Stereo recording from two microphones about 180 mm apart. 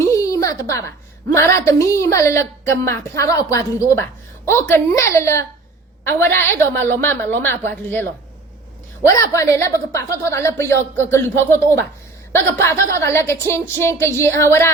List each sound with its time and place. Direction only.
0.0 s a woman's voice: 15° left (ahead or behind)
9.0 s a woman's voice: 15° left (ahead or behind)
12.3 s a woman's voice: 15° left (ahead or behind)